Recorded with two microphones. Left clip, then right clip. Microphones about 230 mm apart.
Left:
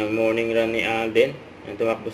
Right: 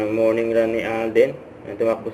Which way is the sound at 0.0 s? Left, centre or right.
Left.